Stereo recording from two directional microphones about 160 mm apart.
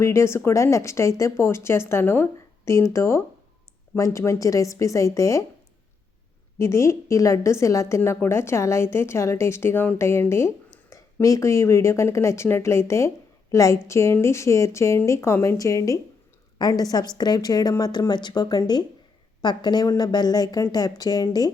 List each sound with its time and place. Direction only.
0.0 s a woman's voice: 15° left (ahead or behind)
6.6 s a woman's voice: 20° left (ahead or behind)